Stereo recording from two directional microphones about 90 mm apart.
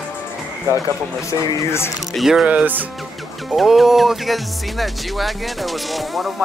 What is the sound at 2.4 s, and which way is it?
Speech, 15° right (ahead or behind).